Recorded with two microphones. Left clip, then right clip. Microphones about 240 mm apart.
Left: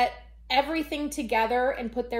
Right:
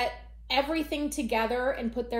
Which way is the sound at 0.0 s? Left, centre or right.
Centre.